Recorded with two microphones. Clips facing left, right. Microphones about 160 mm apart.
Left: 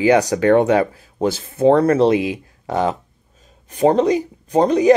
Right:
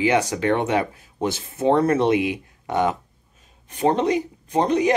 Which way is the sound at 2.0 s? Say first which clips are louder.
Left 4 dB; 30° left (ahead or behind).